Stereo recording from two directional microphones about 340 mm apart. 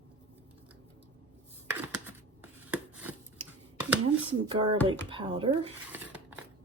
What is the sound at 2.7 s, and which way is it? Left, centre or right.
Chopping, centre.